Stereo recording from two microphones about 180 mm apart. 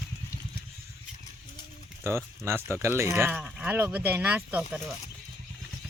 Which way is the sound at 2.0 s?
15° right (ahead or behind).